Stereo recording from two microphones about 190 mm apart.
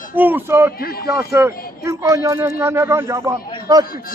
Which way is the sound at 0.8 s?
50° left (ahead or behind).